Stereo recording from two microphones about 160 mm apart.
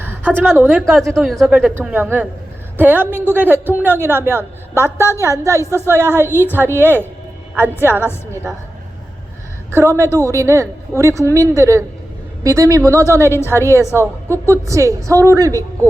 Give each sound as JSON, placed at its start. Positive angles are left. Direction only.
{"t": 0.0, "sound": "a sound", "side_deg": -10}
{"t": 0.6, "sound": "a woman's voice", "side_deg": 0}
{"t": 5.6, "sound": "a woman's voice", "side_deg": 15}
{"t": 5.9, "sound": "a woman's voice", "side_deg": -15}
{"t": 6.2, "sound": "a woman's voice", "side_deg": 15}
{"t": 6.6, "sound": "a woman's voice", "side_deg": -15}
{"t": 9.7, "sound": "a woman's voice", "side_deg": -15}
{"t": 14.0, "sound": "a woman's voice", "side_deg": 15}
{"t": 14.7, "sound": "a woman's voice", "side_deg": -20}